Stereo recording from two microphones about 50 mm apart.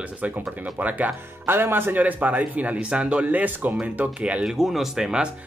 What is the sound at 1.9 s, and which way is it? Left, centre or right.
Speech, right.